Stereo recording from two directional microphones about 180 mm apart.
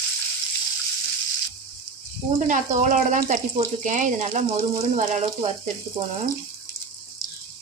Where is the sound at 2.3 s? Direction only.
45° right (ahead or behind).